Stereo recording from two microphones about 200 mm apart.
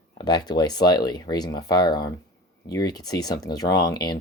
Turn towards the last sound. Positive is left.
turn(degrees=20)  # may be behind; listen again after turning